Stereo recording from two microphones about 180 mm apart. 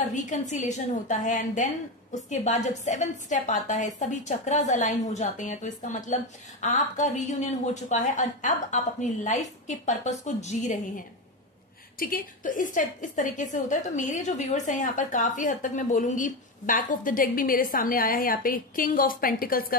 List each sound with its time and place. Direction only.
0.1 s a woman's voice: 45° left (ahead or behind)